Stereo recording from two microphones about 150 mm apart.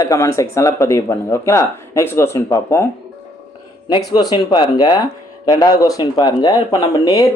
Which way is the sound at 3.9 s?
30° left (ahead or behind).